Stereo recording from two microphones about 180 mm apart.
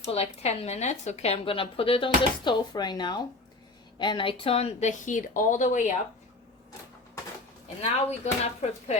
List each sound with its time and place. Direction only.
0.1 s a woman's voice: 35° left (ahead or behind)
7.8 s a woman's voice: 35° left (ahead or behind)